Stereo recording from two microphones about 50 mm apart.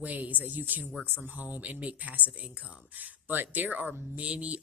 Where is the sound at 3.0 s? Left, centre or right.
Right.